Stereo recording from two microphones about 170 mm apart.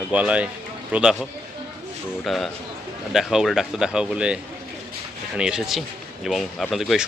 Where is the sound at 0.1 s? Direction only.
5° right (ahead or behind).